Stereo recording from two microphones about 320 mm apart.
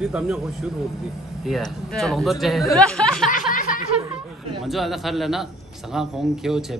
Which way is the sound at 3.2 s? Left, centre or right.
Left.